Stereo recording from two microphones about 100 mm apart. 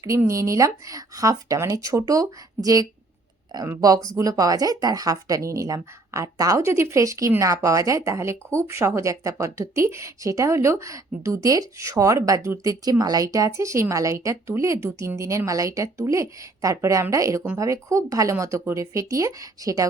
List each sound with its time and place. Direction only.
0.3 s speech: 30° right (ahead or behind)